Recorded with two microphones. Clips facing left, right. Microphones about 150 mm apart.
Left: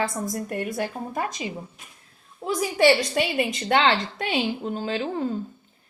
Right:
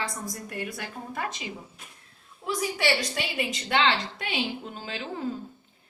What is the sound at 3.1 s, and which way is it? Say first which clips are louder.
A woman's voice: left 7 dB; 45° left (ahead or behind).